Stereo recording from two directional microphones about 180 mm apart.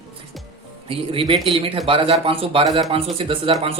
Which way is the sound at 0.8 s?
30° right (ahead or behind).